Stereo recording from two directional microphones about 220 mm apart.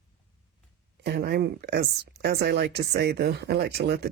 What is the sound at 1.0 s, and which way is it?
Speech, 45° right (ahead or behind).